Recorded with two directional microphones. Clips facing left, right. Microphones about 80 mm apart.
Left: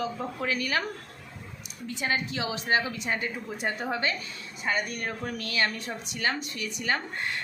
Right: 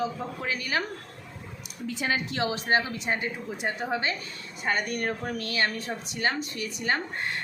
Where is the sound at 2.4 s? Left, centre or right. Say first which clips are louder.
Right 3 dB; right.